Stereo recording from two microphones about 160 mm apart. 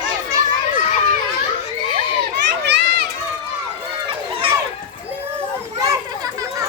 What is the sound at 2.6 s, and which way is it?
Run, 90° right.